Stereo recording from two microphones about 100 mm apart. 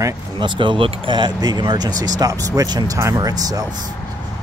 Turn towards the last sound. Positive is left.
turn(degrees=-40)  # may be behind; listen again after turning